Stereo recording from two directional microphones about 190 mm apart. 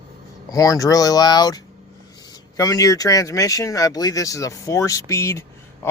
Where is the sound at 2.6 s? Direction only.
20° left (ahead or behind).